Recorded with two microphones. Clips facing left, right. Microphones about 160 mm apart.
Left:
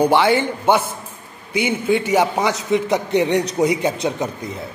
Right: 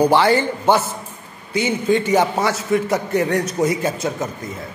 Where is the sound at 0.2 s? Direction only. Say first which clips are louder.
Even; 15° left (ahead or behind).